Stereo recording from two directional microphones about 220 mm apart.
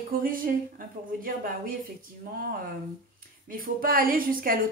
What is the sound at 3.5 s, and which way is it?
Speech, 40° right (ahead or behind).